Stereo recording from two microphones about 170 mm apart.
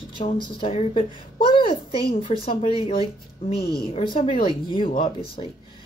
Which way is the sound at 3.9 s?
35° left (ahead or behind).